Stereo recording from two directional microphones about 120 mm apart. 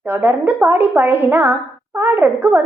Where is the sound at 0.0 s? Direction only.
15° right (ahead or behind).